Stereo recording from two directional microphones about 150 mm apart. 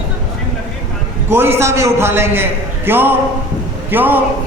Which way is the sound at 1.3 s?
15° right (ahead or behind).